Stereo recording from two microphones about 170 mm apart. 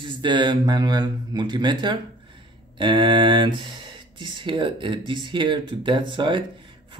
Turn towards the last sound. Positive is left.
turn(degrees=-30)  # may be behind; listen again after turning